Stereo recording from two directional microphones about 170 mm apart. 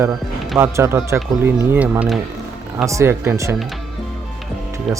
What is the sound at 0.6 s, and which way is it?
Speech, 15° right (ahead or behind).